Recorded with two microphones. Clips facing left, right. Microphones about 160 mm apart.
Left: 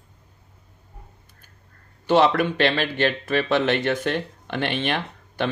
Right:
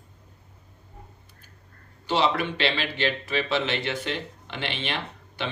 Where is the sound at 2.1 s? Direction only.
50° left (ahead or behind).